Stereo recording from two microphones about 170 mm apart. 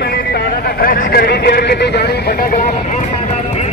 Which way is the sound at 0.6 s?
55° left (ahead or behind).